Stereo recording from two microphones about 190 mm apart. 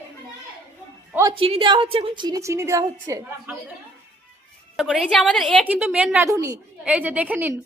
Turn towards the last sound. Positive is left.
turn(degrees=-10)  # may be behind; listen again after turning